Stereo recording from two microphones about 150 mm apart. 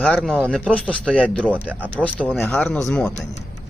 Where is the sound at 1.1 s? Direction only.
10° left (ahead or behind).